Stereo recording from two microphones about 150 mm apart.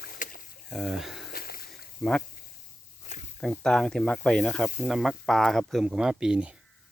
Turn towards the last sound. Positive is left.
turn(degrees=-5)  # may be behind; listen again after turning